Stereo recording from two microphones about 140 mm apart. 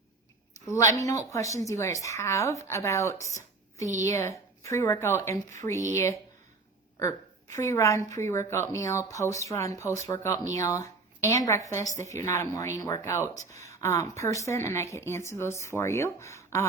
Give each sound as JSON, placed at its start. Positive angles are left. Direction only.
{"t": 0.7, "sound": "a woman's voice", "side_deg": 20}
{"t": 7.5, "sound": "a woman's voice", "side_deg": 20}